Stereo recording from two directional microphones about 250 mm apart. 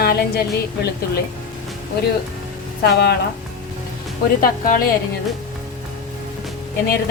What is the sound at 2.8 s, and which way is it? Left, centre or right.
Speech, left.